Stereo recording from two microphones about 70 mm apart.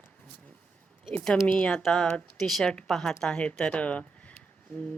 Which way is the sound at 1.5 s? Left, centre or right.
Centre.